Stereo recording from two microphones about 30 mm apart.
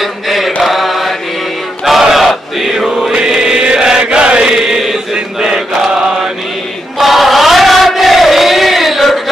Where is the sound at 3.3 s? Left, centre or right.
Centre.